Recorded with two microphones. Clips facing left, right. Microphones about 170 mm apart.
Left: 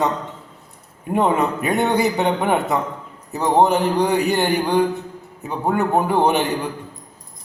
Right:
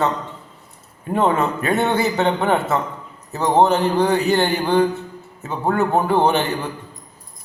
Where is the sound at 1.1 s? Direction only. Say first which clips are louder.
Even; 15° left (ahead or behind).